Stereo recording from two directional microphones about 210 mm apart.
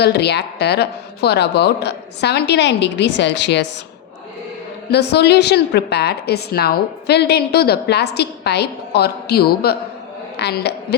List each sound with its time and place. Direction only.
0.0 s a woman's voice: 50° left (ahead or behind)
4.9 s a woman's voice: 50° left (ahead or behind)